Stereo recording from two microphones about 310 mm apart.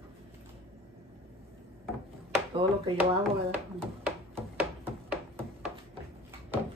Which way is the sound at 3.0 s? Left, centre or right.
Centre.